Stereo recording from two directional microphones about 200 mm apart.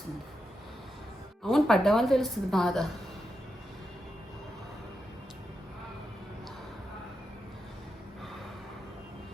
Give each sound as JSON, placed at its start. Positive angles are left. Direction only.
{"t": 1.5, "sound": "a woman's voice", "side_deg": 0}